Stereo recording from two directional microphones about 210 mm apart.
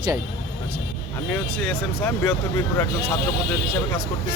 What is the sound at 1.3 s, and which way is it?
Speech, 10° left (ahead or behind).